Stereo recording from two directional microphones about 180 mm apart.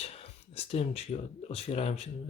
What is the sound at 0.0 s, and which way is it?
Speech, 35° left (ahead or behind).